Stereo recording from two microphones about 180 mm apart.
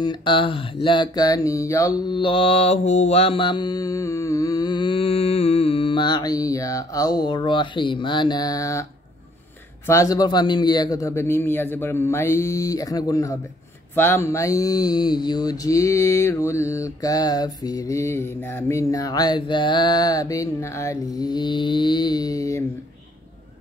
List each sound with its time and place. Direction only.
0.0 s mantra: 25° left (ahead or behind)
9.8 s a man's voice: 20° left (ahead or behind)
13.9 s mantra: 15° left (ahead or behind)